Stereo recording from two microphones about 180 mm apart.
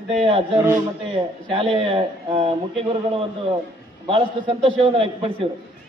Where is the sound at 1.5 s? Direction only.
30° right (ahead or behind).